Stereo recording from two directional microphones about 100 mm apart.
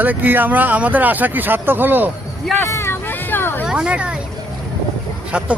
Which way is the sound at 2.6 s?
25° left (ahead or behind).